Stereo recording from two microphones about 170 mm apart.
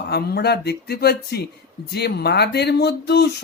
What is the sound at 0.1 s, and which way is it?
Speech, 70° left (ahead or behind).